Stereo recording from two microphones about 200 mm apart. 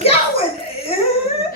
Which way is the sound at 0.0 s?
30° left (ahead or behind).